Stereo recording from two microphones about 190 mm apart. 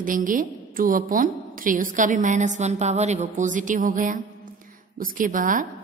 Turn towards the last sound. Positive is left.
turn(degrees=-45)  # may be behind; listen again after turning